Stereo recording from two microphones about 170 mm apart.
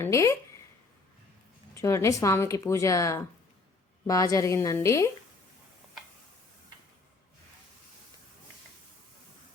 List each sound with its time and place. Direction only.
0.0 s speech: 15° left (ahead or behind)
1.7 s a woman's voice: 15° left (ahead or behind)